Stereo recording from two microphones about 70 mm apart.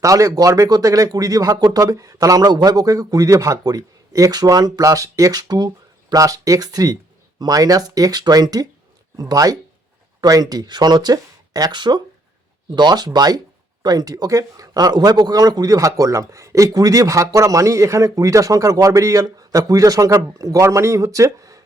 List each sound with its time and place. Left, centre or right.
0.0 s speech: right
13.1 s a man's voice: right